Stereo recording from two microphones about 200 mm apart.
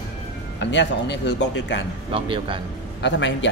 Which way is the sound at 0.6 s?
60° left (ahead or behind).